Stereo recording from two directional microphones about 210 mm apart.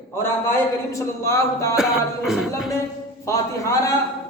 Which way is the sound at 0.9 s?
15° left (ahead or behind).